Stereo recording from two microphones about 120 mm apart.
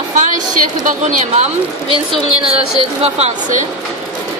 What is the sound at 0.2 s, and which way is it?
Speech, 90° right.